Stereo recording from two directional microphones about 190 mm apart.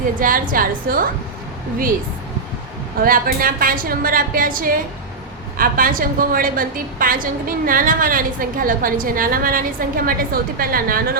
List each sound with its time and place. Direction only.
0.2 s a woman's voice: 45° right (ahead or behind)
3.0 s a woman's voice: 50° right (ahead or behind)